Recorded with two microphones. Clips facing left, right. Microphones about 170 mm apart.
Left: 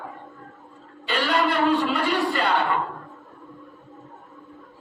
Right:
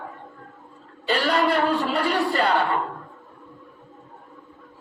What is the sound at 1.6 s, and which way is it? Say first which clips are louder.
Speech: left 1 dB; 40° right (ahead or behind).